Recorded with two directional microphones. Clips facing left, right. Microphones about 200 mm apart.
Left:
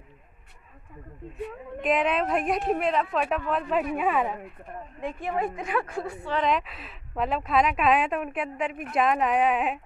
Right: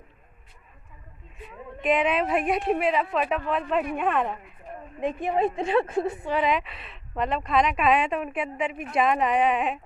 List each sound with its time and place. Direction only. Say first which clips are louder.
1.8 s speech: right 1 dB; centre (ahead or behind)
5.0 s a woman's voice: right 5 dB; 20° right (ahead or behind)
6.4 s speech: right 1 dB; centre (ahead or behind)